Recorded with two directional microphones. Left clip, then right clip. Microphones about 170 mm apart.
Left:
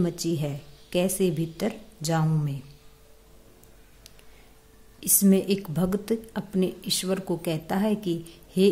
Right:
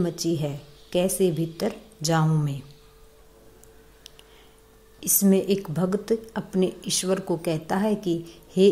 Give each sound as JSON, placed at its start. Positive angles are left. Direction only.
{"t": 0.0, "sound": "speech", "side_deg": 15}
{"t": 5.0, "sound": "speech", "side_deg": 15}